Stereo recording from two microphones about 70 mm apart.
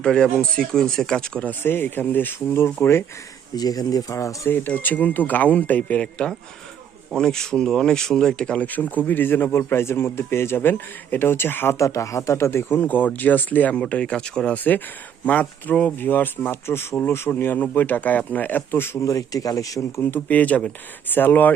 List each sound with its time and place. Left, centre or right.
0.0 s speech: centre
1.5 s speech: left
3.5 s speech: left
4.4 s speech: left
11.8 s speech: left; by 16.0 s centre
16.0 s speech: left
19.0 s speech: left
20.0 s speech: left